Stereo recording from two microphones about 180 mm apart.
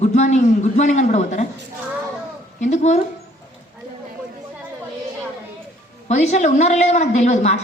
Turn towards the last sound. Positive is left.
turn(degrees=40)  # may be behind; listen again after turning